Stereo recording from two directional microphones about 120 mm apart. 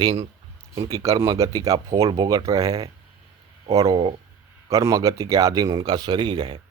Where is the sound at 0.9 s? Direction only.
30° right (ahead or behind).